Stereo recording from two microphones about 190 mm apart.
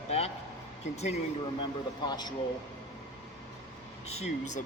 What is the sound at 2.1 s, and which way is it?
Speech, 20° left (ahead or behind).